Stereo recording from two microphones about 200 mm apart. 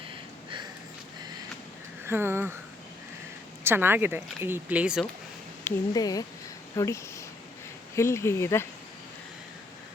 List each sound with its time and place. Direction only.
2.0 s speech: 10° right (ahead or behind)
3.6 s speech: 10° right (ahead or behind)
5.6 s speech: 20° left (ahead or behind)